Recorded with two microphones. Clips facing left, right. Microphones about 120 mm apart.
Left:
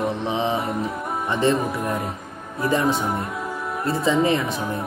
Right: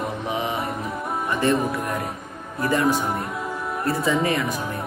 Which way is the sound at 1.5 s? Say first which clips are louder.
Even; centre (ahead or behind).